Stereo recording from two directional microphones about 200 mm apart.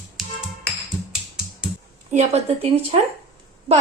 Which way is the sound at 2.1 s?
30° right (ahead or behind).